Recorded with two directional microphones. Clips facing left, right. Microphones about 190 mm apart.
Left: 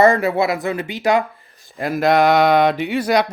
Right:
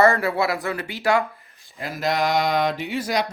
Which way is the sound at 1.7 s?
55° left (ahead or behind).